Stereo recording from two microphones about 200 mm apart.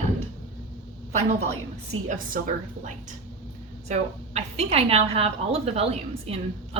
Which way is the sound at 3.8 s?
35° right (ahead or behind).